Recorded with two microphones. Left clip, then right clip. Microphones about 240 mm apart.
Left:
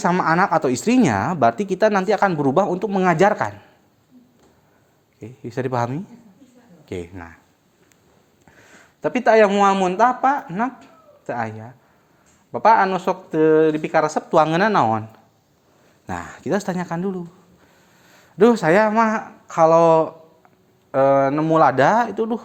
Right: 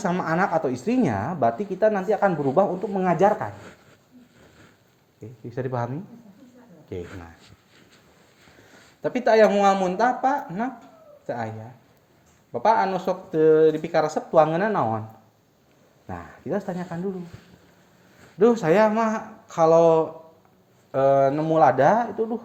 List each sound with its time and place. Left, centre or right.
0.0 s speech: left
5.2 s speech: left
9.0 s speech: left
16.0 s speech: left
18.3 s speech: left